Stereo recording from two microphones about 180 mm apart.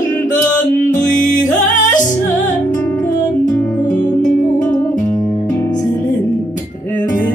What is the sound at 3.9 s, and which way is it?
Music, 45° left (ahead or behind).